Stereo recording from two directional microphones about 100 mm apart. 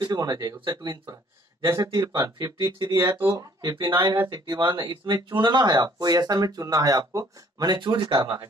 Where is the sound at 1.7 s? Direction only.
40° right (ahead or behind).